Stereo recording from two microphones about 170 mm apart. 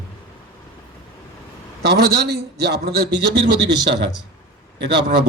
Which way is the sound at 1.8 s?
75° right (ahead or behind).